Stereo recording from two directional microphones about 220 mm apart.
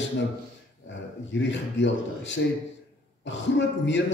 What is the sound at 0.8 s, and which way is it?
A man's voice, 55° left (ahead or behind).